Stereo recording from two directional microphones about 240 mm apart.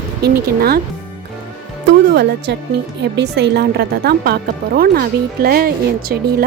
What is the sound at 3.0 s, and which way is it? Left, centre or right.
Speech, right.